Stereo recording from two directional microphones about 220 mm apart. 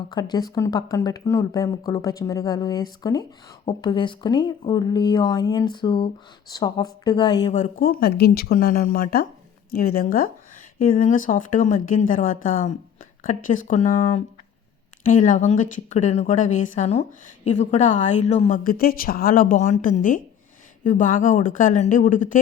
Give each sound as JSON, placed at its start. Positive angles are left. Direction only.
{"t": 0.1, "sound": "speech", "side_deg": 20}
{"t": 7.8, "sound": "a woman's voice", "side_deg": 45}